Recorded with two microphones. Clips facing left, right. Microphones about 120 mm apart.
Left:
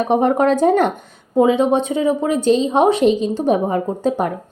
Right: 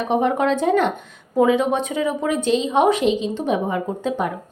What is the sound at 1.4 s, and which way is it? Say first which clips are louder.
A woman's voice: left 3 dB; 25° left (ahead or behind).